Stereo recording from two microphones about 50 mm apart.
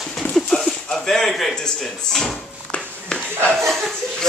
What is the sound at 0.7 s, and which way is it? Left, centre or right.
Speech, centre.